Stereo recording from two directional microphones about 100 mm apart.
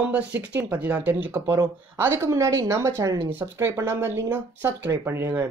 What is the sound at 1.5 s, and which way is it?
Speech, 30° right (ahead or behind).